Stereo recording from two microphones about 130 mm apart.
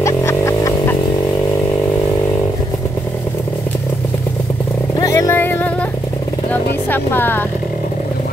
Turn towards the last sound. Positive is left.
turn(degrees=15)  # may be behind; listen again after turning